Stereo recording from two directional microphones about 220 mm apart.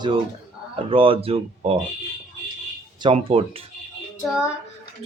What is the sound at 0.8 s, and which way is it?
Speech, 25° right (ahead or behind).